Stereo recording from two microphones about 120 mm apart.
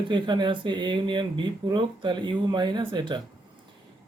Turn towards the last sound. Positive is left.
turn(degrees=-40)  # may be behind; listen again after turning